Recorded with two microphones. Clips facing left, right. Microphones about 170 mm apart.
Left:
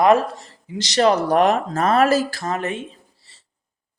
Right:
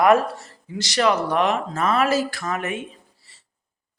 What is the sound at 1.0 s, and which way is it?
Speech, 35° left (ahead or behind).